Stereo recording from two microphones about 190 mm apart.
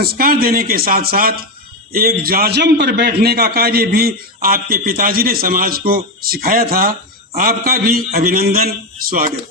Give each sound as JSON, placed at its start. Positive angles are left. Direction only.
{"t": 0.0, "sound": "a man's voice", "side_deg": -50}